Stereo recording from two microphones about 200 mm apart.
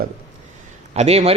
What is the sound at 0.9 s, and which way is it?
Speech, 30° right (ahead or behind).